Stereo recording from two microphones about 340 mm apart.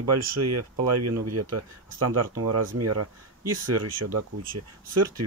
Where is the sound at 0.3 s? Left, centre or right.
Right.